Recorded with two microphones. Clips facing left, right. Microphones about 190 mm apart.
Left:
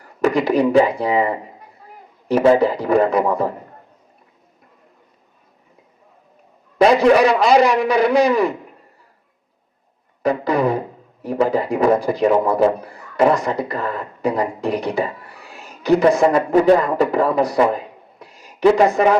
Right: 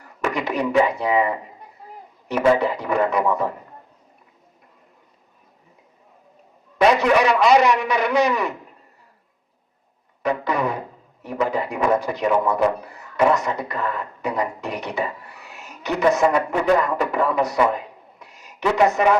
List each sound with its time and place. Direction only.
0.0 s a man's voice: 35° left (ahead or behind)
6.7 s a man's voice: 30° left (ahead or behind)
10.2 s speech: 35° left (ahead or behind)